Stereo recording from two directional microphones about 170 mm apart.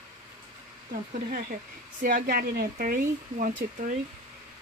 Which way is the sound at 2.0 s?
55° right (ahead or behind).